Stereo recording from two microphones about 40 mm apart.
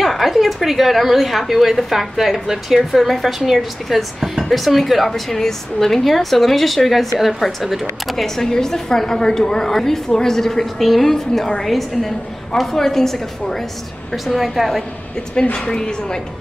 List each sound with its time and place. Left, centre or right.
0.0 s a woman's voice: centre
8.4 s a woman's voice: centre
14.1 s a woman's voice: centre
15.5 s a woman's voice: centre